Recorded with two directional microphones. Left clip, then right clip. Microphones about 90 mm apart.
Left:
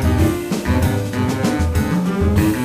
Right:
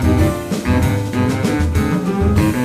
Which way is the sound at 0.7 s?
20° right (ahead or behind).